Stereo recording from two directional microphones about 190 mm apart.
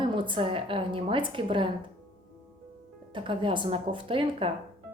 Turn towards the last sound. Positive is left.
turn(degrees=-30)  # may be behind; listen again after turning